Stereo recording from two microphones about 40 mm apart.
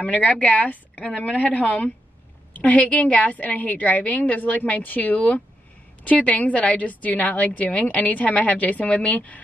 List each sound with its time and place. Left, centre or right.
0.0 s a woman's voice: left